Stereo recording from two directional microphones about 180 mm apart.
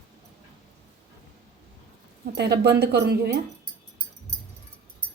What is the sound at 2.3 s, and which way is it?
Speech, 70° right (ahead or behind).